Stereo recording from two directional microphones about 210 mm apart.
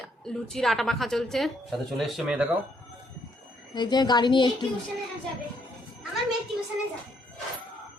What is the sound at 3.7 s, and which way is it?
Speech, 20° left (ahead or behind).